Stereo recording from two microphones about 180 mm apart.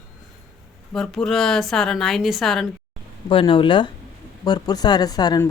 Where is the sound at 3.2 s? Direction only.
30° left (ahead or behind).